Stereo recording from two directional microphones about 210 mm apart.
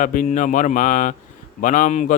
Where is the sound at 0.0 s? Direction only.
40° left (ahead or behind).